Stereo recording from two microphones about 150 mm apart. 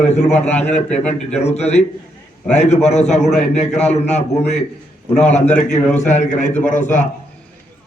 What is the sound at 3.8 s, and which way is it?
Speech, 45° left (ahead or behind).